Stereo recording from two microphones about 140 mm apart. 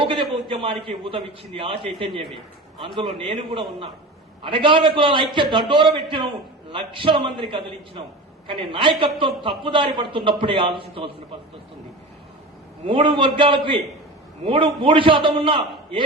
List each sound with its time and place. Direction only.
0.0 s a man's voice: 40° right (ahead or behind)
12.8 s a woman's voice: 40° right (ahead or behind)